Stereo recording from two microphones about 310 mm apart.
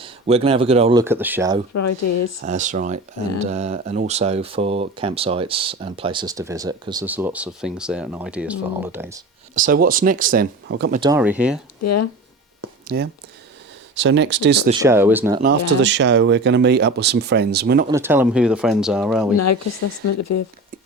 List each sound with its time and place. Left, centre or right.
0.0 s speech: centre
1.7 s speech: left
2.4 s speech: right; by 9.2 s centre
9.6 s speech: right
11.0 s speech: centre
11.8 s speech: left
12.6 s a sound: right
13.9 s speech: right
14.7 s speech: centre
15.4 s speech: right
17.8 s speech: centre
20.1 s speech: left